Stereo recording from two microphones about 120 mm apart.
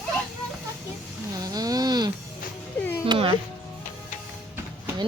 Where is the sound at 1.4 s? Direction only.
30° right (ahead or behind).